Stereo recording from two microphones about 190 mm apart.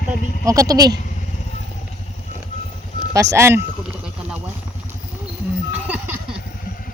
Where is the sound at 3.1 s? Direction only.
15° right (ahead or behind).